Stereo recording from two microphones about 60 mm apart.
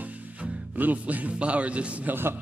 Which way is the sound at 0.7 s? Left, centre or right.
Right.